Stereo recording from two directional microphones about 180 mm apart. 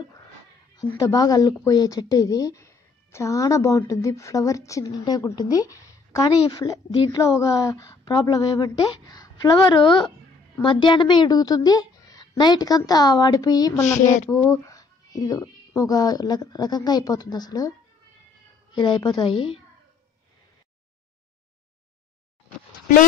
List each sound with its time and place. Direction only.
0.7 s a woman's voice: 20° left (ahead or behind)
13.7 s child singing: 40° left (ahead or behind)
14.3 s a woman's voice: 15° left (ahead or behind)